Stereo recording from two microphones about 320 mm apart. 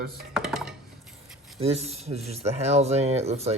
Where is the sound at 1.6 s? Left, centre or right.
Centre.